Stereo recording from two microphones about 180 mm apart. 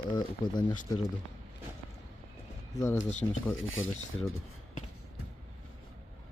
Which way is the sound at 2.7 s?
20° left (ahead or behind).